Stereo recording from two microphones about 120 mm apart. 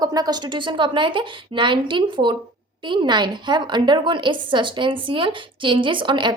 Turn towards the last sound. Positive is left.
turn(degrees=-40)  # may be behind; listen again after turning